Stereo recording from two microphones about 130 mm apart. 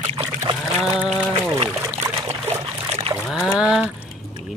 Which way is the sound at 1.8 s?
25° right (ahead or behind).